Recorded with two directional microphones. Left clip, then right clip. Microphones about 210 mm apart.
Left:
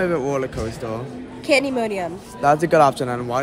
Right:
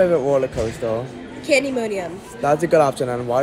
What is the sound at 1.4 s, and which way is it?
Speech, 25° left (ahead or behind).